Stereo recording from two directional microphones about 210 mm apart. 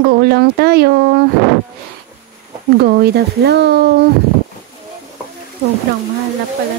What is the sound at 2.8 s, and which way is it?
Speech, 50° right (ahead or behind).